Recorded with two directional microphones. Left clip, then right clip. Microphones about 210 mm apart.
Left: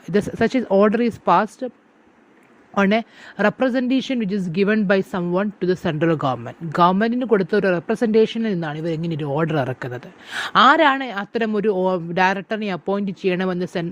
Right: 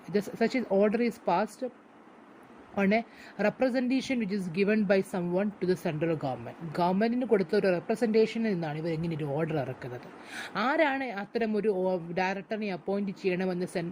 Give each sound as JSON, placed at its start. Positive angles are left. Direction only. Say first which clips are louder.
{"t": 0.0, "sound": "speech", "louder": "left 9 dB", "side_deg": 40}
{"t": 2.7, "sound": "speech", "louder": "left 9 dB", "side_deg": 35}